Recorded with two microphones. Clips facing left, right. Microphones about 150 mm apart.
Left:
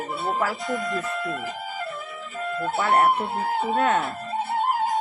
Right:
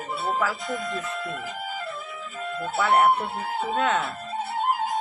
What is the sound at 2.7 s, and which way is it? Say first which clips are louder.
Speech: right 1 dB; 35° left (ahead or behind).